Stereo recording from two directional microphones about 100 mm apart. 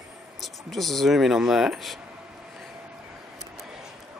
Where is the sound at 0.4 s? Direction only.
Centre (ahead or behind).